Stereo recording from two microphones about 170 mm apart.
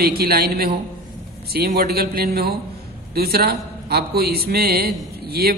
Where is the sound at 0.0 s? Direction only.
65° right (ahead or behind).